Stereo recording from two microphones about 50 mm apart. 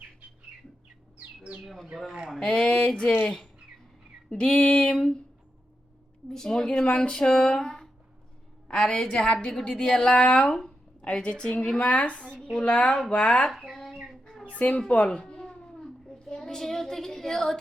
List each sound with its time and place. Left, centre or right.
1.6 s a woman's voice: centre
3.2 s a woman's voice: centre
6.3 s a woman's voice: centre
13.7 s a sound: centre
14.5 s speech: left
14.8 s cat: left
16.0 s child singing: centre